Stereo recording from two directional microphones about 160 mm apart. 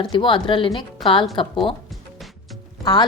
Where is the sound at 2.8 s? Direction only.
25° left (ahead or behind).